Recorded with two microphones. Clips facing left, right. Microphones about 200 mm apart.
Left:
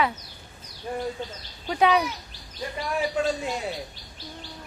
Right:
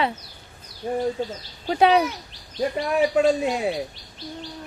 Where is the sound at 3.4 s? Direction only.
60° right (ahead or behind).